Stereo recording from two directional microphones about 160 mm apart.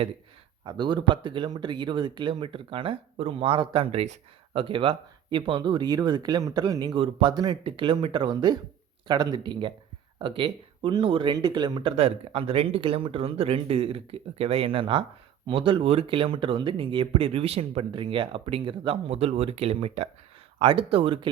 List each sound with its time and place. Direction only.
0.6 s speech: 30° right (ahead or behind)